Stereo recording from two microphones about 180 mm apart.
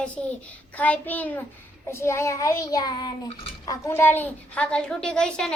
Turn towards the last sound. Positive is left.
turn(degrees=5)  # may be behind; listen again after turning